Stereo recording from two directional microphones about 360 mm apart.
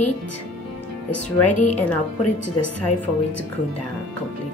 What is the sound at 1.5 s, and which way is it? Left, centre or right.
Speech, left.